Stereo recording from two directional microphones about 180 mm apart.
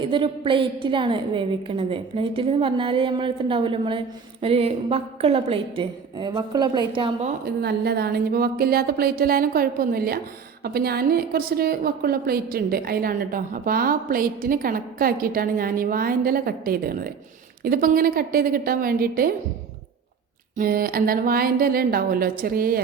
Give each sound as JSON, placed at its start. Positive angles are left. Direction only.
{"t": 0.1, "sound": "a woman's voice", "side_deg": -30}
{"t": 7.4, "sound": "a woman's voice", "side_deg": -65}
{"t": 20.6, "sound": "a woman's voice", "side_deg": -55}